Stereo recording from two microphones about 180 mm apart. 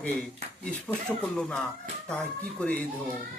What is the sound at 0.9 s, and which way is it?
Speech, 20° left (ahead or behind).